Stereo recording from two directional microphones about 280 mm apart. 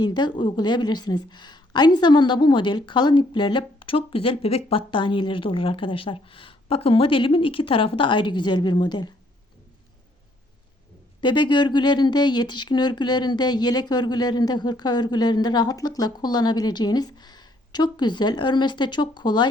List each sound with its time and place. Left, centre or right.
0.0 s speech: centre
11.2 s speech: centre